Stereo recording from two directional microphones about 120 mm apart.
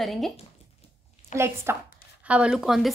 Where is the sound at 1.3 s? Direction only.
20° right (ahead or behind).